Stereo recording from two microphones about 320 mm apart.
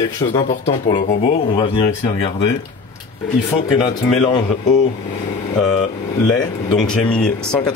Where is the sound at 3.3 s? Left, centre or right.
Centre.